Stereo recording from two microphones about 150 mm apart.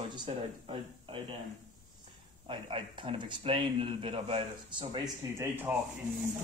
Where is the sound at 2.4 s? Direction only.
35° right (ahead or behind).